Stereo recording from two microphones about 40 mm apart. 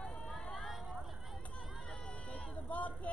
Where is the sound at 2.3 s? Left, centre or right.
Left.